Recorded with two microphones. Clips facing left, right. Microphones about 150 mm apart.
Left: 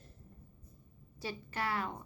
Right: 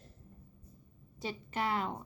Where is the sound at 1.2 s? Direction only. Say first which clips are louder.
Right 3 dB; 20° right (ahead or behind).